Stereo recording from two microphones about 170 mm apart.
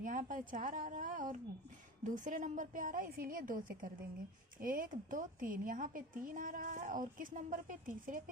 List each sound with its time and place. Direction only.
0.0 s a woman's voice: 50° right (ahead or behind)